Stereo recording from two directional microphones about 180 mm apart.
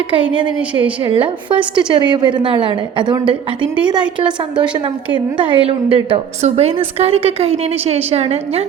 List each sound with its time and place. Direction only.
0.1 s a woman's voice: 30° right (ahead or behind)
5.1 s a woman's voice: 30° right (ahead or behind)